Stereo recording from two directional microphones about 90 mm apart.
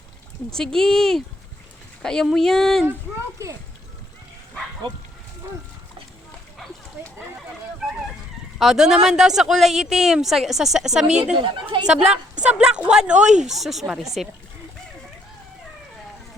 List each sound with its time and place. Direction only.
0.5 s a woman's voice: 5° left (ahead or behind)
8.5 s a woman's voice: 5° right (ahead or behind)
11.3 s speech: 65° right (ahead or behind)
11.9 s a woman's voice: 10° right (ahead or behind)